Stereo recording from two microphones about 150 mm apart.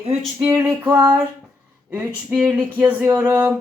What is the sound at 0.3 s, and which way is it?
Speech, 15° right (ahead or behind).